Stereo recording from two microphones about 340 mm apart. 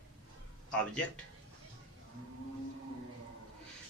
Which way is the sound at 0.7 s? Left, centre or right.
Centre.